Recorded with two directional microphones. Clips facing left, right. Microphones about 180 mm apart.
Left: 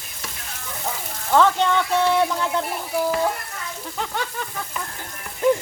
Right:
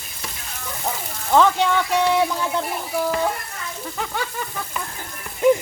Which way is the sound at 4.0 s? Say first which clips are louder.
Even; 5° right (ahead or behind).